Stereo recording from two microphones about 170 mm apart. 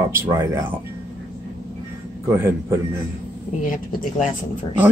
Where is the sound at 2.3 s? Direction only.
15° right (ahead or behind).